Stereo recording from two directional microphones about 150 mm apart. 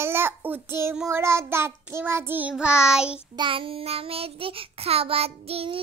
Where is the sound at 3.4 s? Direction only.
35° right (ahead or behind).